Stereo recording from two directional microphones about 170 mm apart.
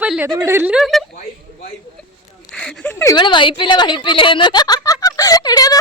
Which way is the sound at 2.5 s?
5° left (ahead or behind).